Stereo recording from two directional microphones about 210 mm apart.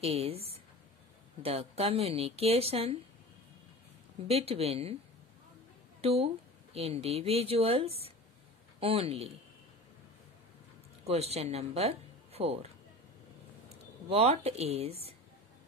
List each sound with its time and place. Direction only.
0.0 s a woman's voice: 30° right (ahead or behind)
4.3 s a woman's voice: 30° right (ahead or behind)
5.9 s speech: 30° right (ahead or behind)
11.1 s speech: 30° right (ahead or behind)
14.0 s a woman's voice: 30° right (ahead or behind)